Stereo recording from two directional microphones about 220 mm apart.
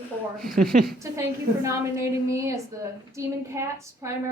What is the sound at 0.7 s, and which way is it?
Speech, 45° right (ahead or behind).